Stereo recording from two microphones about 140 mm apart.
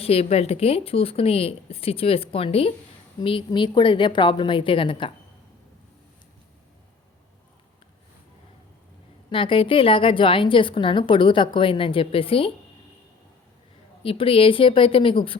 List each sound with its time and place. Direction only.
0.0 s a woman's voice: 45° left (ahead or behind)
9.3 s a woman's voice: 40° left (ahead or behind)
14.0 s a woman's voice: 40° left (ahead or behind)